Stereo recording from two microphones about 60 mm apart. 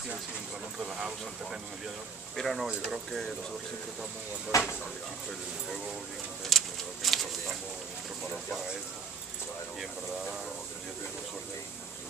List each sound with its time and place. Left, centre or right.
0.7 s speech: centre
2.3 s speech: centre
4.5 s speech: left
6.5 s a sound: centre